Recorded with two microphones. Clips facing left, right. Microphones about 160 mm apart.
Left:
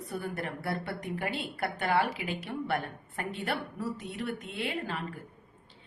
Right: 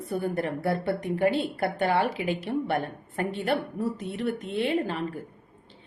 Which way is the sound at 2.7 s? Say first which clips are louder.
Right 4 dB; 45° right (ahead or behind).